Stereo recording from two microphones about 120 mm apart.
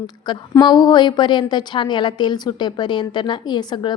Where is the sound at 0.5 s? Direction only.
35° left (ahead or behind).